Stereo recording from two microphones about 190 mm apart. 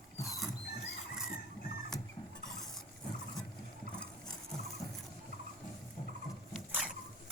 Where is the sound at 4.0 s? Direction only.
5° left (ahead or behind).